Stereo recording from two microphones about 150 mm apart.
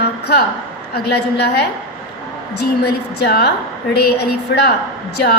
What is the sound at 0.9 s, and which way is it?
Speech, 90° left.